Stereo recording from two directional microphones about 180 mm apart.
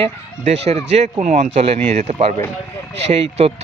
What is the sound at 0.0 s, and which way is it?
Speech, 35° right (ahead or behind).